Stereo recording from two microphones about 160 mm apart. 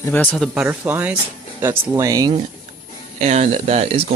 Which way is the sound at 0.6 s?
10° right (ahead or behind).